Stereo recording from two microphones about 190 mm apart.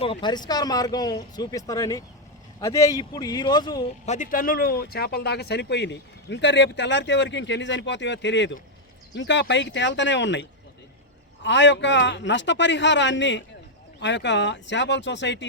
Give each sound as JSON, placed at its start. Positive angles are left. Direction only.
{"t": 0.0, "sound": "speech", "side_deg": 25}
{"t": 4.0, "sound": "speech", "side_deg": 40}
{"t": 11.4, "sound": "speech", "side_deg": 70}